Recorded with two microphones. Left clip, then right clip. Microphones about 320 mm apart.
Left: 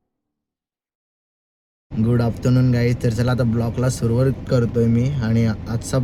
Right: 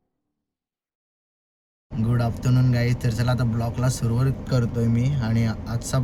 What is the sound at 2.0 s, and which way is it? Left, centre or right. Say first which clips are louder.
Speech: left 6 dB; centre.